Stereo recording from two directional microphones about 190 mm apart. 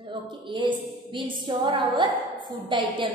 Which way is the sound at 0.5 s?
25° right (ahead or behind).